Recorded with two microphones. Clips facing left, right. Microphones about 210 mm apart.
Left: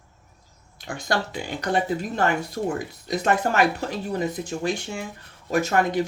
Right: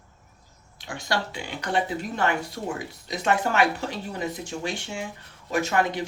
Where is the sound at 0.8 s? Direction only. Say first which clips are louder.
Left 3 dB; 45° left (ahead or behind).